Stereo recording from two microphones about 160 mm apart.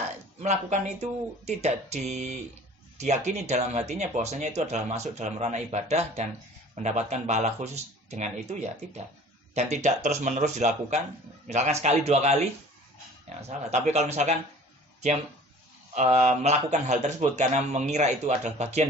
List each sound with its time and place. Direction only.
0.3 s speech: 45° right (ahead or behind)
9.6 s speech: 45° right (ahead or behind)
13.7 s speech: 45° right (ahead or behind)
16.0 s speech: 45° right (ahead or behind)